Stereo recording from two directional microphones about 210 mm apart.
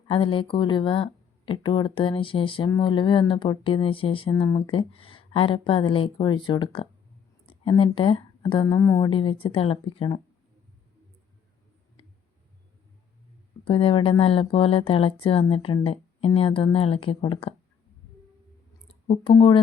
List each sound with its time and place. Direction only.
0.1 s speech: 25° left (ahead or behind)
13.7 s speech: 25° left (ahead or behind)
18.9 s speech: 25° left (ahead or behind)